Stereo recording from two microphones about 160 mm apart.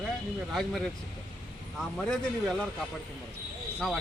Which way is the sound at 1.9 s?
5° left (ahead or behind).